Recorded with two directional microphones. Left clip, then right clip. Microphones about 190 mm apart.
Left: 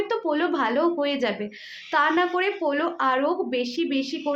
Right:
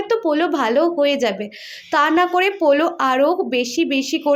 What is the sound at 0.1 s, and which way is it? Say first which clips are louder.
A woman's voice: right 11 dB; 30° right (ahead or behind).